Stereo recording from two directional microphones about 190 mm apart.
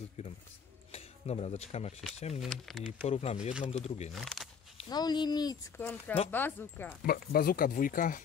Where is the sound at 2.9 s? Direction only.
35° left (ahead or behind).